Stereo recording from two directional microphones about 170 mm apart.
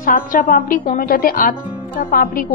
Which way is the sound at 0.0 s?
55° left (ahead or behind).